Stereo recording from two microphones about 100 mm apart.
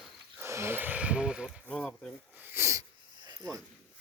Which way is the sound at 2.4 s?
20° right (ahead or behind).